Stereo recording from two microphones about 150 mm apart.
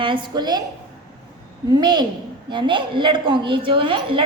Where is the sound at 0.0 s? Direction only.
35° right (ahead or behind).